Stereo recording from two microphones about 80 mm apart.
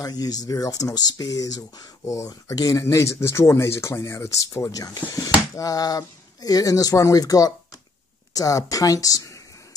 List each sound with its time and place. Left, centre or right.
0.0 s speech: left